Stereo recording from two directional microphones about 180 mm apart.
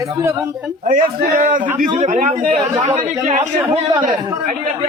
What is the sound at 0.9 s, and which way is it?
A man's voice, 45° right (ahead or behind).